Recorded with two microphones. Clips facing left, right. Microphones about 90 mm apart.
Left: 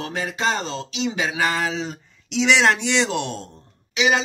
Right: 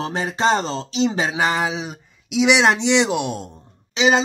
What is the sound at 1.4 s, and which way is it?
Speech, 20° right (ahead or behind).